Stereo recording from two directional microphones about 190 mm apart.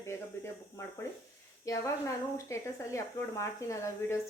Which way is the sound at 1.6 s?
15° left (ahead or behind).